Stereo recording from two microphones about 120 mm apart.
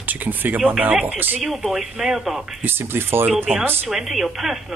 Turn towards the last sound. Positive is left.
turn(degrees=0)  # may be behind; listen again after turning